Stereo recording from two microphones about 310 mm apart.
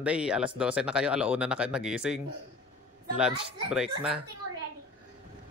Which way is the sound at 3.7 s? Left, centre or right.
Centre.